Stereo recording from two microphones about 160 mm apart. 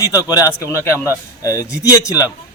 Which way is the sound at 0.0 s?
25° left (ahead or behind).